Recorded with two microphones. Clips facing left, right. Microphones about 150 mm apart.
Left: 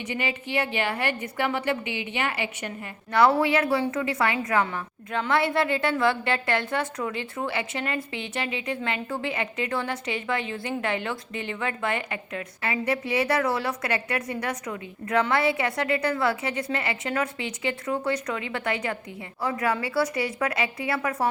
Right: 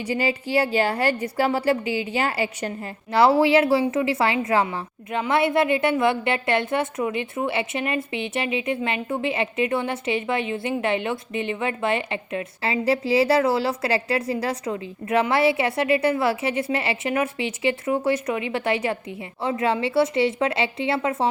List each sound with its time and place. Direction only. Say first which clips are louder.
0.0 s a woman's voice: right 6 dB; 35° right (ahead or behind)